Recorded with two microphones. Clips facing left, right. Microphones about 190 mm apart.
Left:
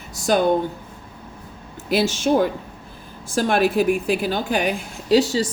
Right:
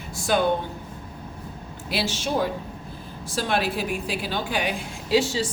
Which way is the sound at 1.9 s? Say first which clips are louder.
Left 8 dB; 45° left (ahead or behind).